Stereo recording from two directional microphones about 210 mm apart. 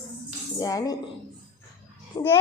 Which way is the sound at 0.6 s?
15° left (ahead or behind).